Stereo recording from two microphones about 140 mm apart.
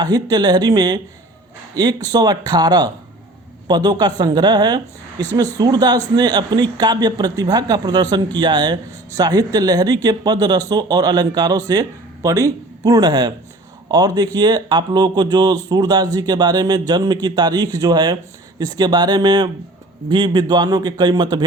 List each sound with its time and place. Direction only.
0.0 s a man's voice: 30° right (ahead or behind)